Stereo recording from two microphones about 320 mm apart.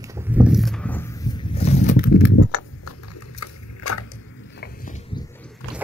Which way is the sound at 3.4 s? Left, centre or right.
Left.